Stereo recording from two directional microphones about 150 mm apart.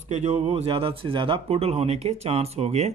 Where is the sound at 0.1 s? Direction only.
50° right (ahead or behind).